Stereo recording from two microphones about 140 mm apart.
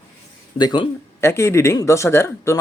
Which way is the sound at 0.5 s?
35° left (ahead or behind).